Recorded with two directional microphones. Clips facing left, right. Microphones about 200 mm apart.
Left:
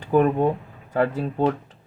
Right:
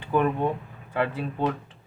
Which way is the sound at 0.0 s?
40° left (ahead or behind).